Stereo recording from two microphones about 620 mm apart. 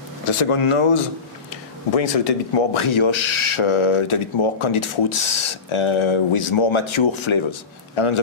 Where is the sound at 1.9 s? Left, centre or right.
Left.